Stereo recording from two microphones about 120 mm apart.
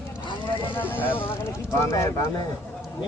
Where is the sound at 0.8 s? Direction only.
15° left (ahead or behind).